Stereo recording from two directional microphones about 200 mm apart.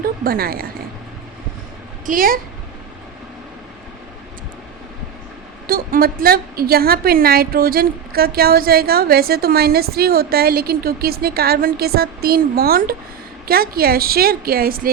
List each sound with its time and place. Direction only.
0.0 s speech: 50° right (ahead or behind)
2.0 s a woman's voice: 45° right (ahead or behind)
5.6 s a woman's voice: 45° right (ahead or behind)